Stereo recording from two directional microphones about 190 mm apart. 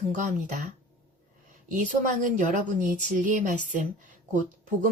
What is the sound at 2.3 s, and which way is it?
Speech, 40° right (ahead or behind).